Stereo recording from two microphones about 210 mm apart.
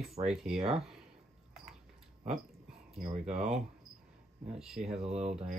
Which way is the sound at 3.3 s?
Centre (ahead or behind).